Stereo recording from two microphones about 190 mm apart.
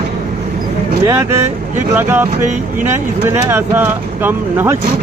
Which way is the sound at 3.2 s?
10° right (ahead or behind).